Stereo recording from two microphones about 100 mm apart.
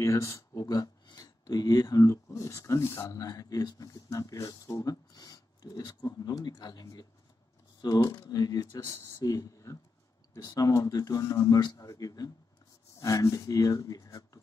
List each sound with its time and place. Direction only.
0.0 s speech: 35° left (ahead or behind)